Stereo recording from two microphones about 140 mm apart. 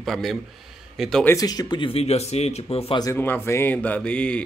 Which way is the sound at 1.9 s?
50° left (ahead or behind).